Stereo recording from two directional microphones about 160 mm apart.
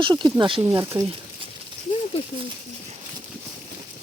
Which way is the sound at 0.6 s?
20° right (ahead or behind).